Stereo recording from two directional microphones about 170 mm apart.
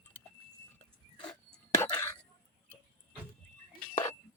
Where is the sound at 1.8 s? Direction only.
15° left (ahead or behind).